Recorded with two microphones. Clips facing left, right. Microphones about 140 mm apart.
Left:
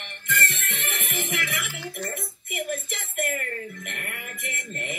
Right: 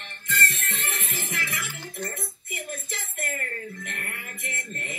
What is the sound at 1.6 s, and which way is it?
Music, 90° left.